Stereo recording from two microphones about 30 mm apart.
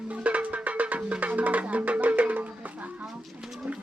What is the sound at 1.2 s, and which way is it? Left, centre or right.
Music, right.